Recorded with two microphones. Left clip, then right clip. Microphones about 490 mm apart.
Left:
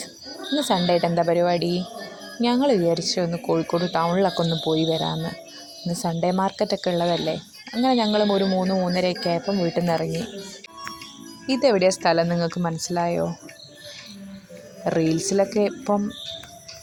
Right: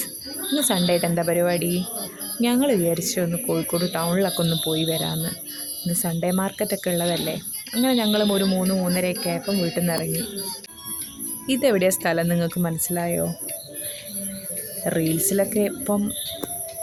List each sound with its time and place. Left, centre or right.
0.6 s speech: right
2.9 s speech: right
11.4 s speech: right
14.8 s speech: right